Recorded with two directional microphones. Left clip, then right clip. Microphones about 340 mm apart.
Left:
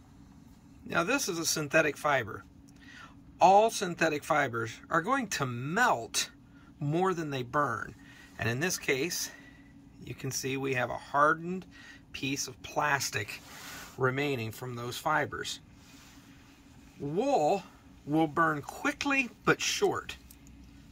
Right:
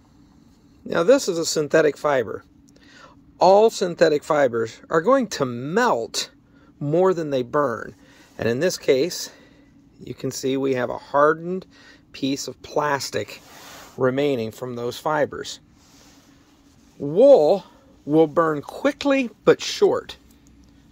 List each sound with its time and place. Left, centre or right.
0.8 s speech: centre
17.1 s speech: centre